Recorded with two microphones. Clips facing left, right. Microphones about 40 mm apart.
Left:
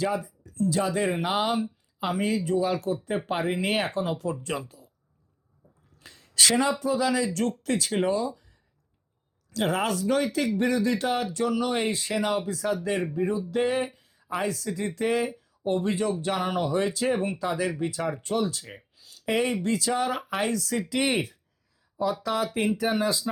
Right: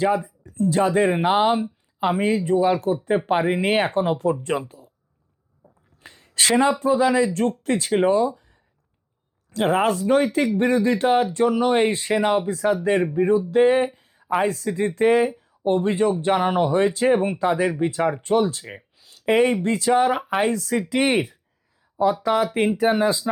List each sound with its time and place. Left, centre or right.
0.0 s speech: right
9.5 s speech: right
18.9 s a sound: right
19.5 s speech: right